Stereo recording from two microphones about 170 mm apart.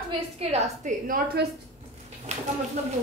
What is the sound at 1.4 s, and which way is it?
Speech, 80° right.